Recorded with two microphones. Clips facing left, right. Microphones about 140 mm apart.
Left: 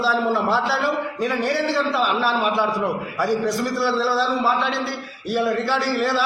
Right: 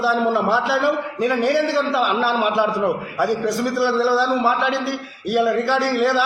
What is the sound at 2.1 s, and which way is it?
Speech, 65° right (ahead or behind).